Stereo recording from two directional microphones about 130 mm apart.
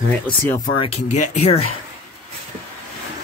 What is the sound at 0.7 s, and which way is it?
Speech, 50° left (ahead or behind).